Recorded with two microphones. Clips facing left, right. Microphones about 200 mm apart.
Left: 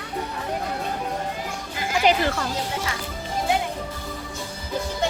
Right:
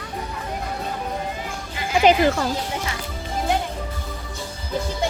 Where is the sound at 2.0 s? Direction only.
20° right (ahead or behind).